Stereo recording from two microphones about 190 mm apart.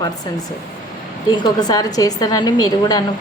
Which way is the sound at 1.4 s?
20° left (ahead or behind).